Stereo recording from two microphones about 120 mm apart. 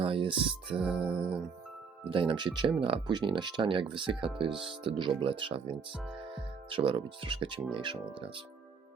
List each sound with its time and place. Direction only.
0.0 s speech: 50° right (ahead or behind)
0.8 s music: 5° right (ahead or behind)
2.0 s speech: 45° right (ahead or behind)